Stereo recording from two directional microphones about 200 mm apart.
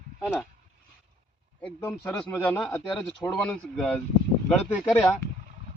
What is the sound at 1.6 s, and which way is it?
Speech, 5° left (ahead or behind).